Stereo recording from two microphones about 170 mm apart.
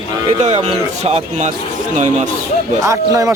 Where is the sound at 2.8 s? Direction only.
20° right (ahead or behind).